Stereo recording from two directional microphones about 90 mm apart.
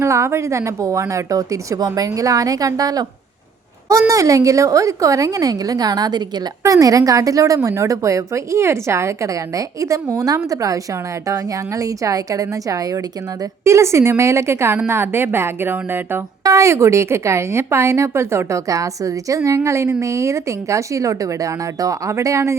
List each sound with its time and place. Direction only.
0.0 s a woman's voice: 30° right (ahead or behind)
16.4 s a woman's voice: 35° right (ahead or behind)